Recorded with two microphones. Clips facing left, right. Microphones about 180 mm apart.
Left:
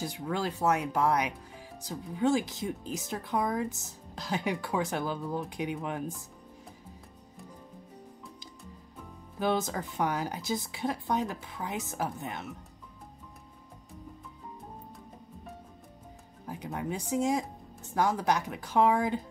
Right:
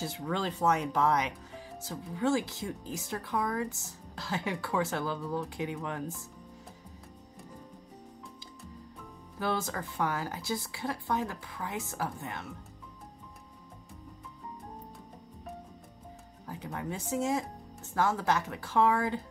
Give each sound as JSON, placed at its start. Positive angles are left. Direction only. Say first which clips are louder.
{"t": 0.0, "sound": "speech", "louder": "left 1 dB", "side_deg": 10}
{"t": 9.4, "sound": "speech", "louder": "left 3 dB", "side_deg": 20}
{"t": 16.4, "sound": "speech", "louder": "left 2 dB", "side_deg": 15}